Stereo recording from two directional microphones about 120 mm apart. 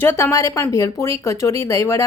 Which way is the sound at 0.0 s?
20° left (ahead or behind).